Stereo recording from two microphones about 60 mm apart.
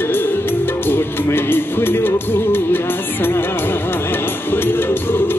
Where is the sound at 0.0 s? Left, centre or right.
Left.